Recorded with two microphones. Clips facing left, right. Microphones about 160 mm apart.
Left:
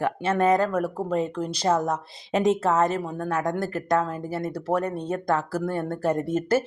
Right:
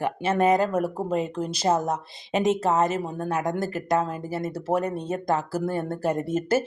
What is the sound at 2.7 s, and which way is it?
Speech, 20° right (ahead or behind).